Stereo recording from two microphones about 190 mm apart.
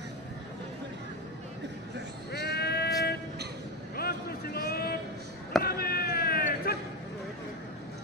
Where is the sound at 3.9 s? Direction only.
55° left (ahead or behind).